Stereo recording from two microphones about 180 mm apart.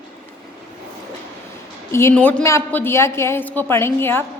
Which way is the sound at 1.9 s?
10° left (ahead or behind).